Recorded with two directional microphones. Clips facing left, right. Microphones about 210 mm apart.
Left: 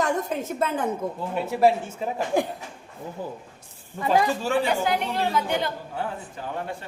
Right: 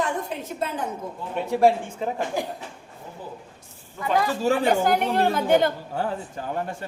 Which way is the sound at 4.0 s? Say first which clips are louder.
Left 2 dB; 30° left (ahead or behind).